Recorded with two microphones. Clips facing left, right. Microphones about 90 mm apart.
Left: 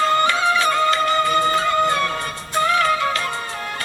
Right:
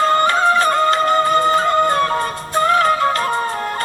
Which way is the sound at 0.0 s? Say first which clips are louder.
Right 3 dB; 40° right (ahead or behind).